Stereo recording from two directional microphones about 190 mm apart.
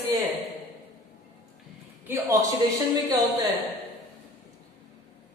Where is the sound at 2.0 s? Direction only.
10° right (ahead or behind).